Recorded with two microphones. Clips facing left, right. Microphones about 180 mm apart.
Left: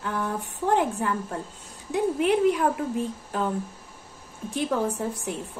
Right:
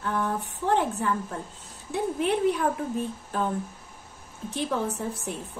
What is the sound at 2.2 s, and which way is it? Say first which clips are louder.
Speech: left 3 dB; 10° left (ahead or behind).